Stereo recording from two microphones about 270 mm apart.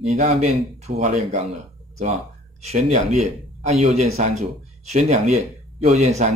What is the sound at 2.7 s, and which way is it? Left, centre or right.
Speech, right.